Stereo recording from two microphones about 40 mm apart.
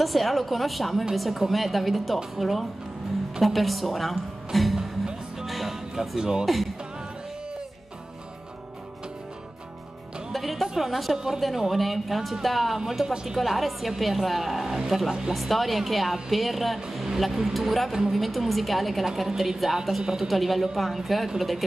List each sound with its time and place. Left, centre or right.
0.0 s a woman's voice: centre
5.5 s music: centre
6.1 s a woman's voice: centre
6.4 s a woman's voice: centre
10.3 s music: centre
10.7 s a woman's voice: centre
11.1 s a woman's voice: centre
11.7 s a woman's voice: centre
13.4 s a woman's voice: centre
17.9 s a woman's voice: centre
18.2 s a woman's voice: centre